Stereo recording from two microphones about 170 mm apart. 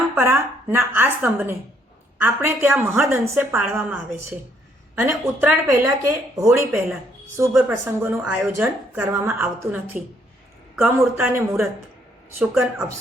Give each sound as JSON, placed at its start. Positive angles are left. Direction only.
{"t": 0.2, "sound": "a woman's voice", "side_deg": -15}